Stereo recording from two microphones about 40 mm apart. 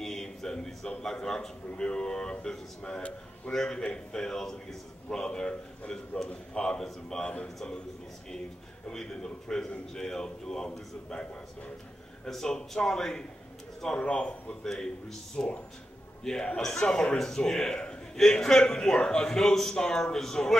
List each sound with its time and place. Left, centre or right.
0.0 s a sound: centre
0.8 s a man's voice: centre
8.9 s a man's voice: centre
12.3 s a man's voice: centre; by 14.3 s left
14.6 s a man's voice: centre
15.3 s a man's voice: left
16.3 s a man's voice: centre